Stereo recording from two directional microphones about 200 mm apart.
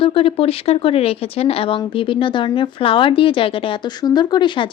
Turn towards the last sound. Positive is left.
turn(degrees=25)  # may be behind; listen again after turning